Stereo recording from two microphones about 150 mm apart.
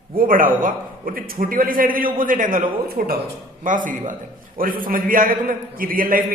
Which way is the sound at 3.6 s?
60° right (ahead or behind).